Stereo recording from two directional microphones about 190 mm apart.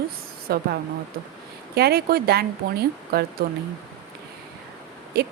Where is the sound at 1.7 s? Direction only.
55° right (ahead or behind).